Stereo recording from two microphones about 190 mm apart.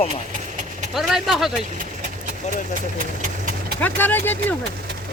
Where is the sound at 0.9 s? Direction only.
Centre (ahead or behind).